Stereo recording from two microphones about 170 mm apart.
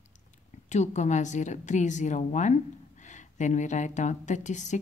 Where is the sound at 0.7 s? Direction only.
40° left (ahead or behind).